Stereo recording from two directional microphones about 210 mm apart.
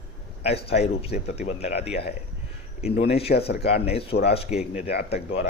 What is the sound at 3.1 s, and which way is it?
Speech, 30° left (ahead or behind).